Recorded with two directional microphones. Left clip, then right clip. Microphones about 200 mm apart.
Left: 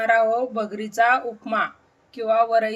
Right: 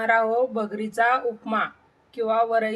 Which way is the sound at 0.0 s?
5° left (ahead or behind).